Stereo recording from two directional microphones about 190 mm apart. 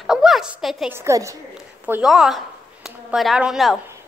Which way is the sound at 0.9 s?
15° right (ahead or behind).